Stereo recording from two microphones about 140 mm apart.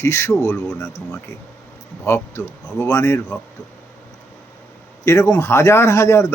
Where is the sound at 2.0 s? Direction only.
20° left (ahead or behind).